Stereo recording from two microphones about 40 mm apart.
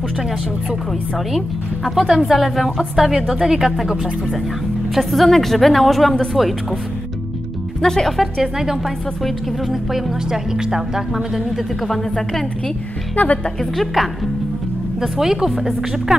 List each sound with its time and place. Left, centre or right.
2.1 s a woman's voice: centre
7.8 s a woman's voice: centre
8.4 s speech: centre
11.5 s a woman's voice: centre
13.1 s speech: left
13.6 s a woman's voice: centre
15.0 s speech: centre